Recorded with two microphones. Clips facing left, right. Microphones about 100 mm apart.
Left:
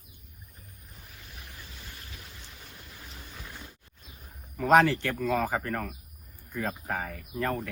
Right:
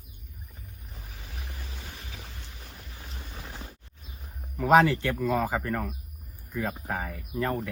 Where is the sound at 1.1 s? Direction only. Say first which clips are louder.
Right 4 dB; 90° right.